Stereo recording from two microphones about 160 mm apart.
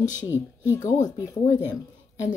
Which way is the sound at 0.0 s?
50° left (ahead or behind).